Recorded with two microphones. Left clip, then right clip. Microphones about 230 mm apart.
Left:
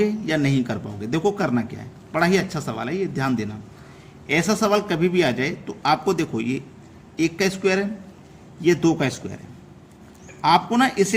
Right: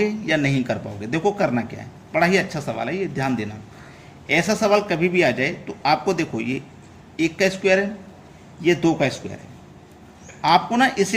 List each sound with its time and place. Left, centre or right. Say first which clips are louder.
0.0 s speech: right 1 dB; centre
10.4 s speech: right 1 dB; left